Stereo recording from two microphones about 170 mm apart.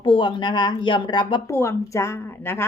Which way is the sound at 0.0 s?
30° left (ahead or behind).